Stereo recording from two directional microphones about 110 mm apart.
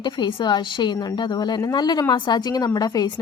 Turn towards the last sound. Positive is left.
turn(degrees=35)  # may be behind; listen again after turning